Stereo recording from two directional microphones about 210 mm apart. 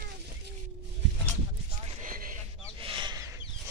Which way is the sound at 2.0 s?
40° right (ahead or behind).